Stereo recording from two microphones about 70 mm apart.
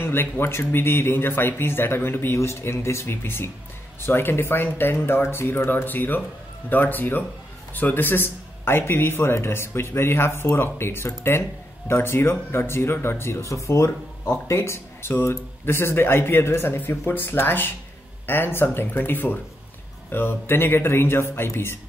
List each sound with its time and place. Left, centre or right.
0.0 s speech: left